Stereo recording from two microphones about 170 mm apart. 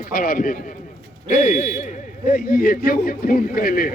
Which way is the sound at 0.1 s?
60° left (ahead or behind).